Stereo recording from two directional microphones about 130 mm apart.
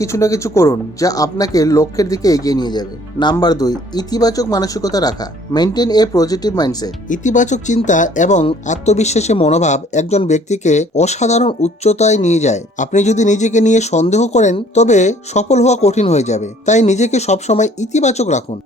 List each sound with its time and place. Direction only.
0.0 s speech: 25° left (ahead or behind)
7.1 s speech: 70° left (ahead or behind)